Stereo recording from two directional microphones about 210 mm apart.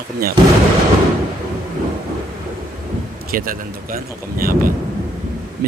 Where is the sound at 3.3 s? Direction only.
40° right (ahead or behind).